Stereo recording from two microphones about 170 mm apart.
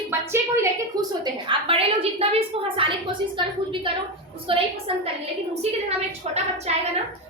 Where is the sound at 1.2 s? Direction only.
30° right (ahead or behind).